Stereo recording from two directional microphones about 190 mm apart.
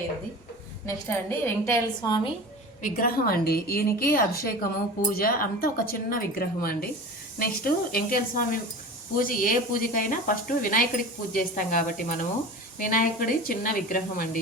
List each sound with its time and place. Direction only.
0.9 s a woman's voice: 10° left (ahead or behind)
2.8 s a woman's voice: 50° left (ahead or behind)